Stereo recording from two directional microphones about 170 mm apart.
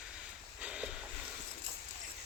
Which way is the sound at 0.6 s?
5° right (ahead or behind).